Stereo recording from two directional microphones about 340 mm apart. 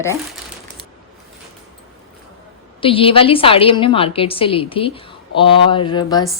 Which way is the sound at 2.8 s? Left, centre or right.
Centre.